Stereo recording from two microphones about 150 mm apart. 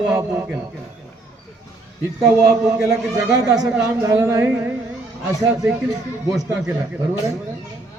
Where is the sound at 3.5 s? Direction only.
5° right (ahead or behind).